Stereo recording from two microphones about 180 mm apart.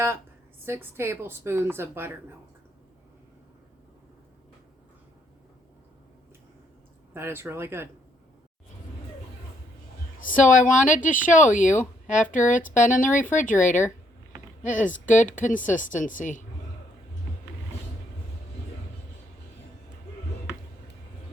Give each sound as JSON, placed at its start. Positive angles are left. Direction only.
{"t": 0.6, "sound": "a woman's voice", "side_deg": -15}
{"t": 7.1, "sound": "a woman's voice", "side_deg": -15}
{"t": 10.2, "sound": "speech", "side_deg": 45}